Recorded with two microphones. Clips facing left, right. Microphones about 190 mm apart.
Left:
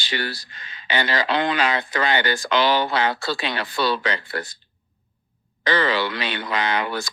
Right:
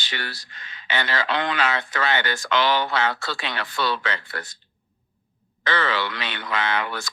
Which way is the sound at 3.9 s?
15° left (ahead or behind).